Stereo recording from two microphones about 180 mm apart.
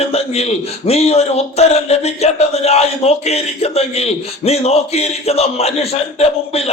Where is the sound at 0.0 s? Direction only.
35° left (ahead or behind).